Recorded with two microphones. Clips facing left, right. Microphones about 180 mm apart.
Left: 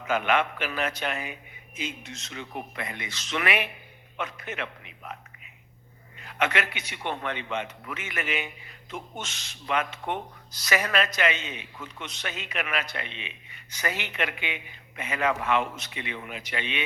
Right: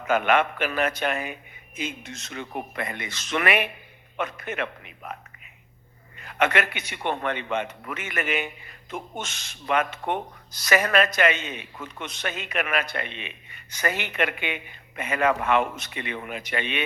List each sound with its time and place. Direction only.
0.1 s a man's voice: 55° right (ahead or behind)
6.1 s speech: 50° right (ahead or behind)